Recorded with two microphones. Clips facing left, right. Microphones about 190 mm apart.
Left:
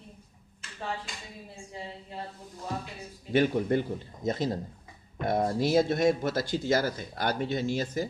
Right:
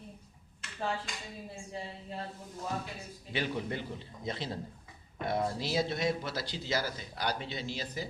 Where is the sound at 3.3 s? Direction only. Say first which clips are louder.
Left 10 dB; 50° left (ahead or behind).